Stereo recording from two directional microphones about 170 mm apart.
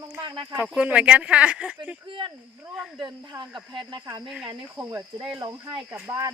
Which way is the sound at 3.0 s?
25° right (ahead or behind).